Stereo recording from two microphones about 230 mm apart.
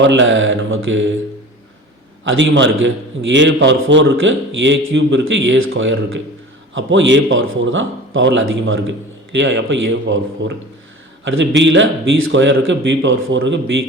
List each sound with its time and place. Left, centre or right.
0.0 s a man's voice: right
2.2 s a man's voice: right